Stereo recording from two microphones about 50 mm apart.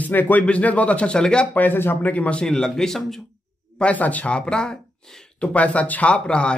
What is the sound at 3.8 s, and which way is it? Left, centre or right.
Speech, left.